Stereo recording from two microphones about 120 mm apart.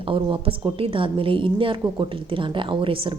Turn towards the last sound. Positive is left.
turn(degrees=-45)  # may be behind; listen again after turning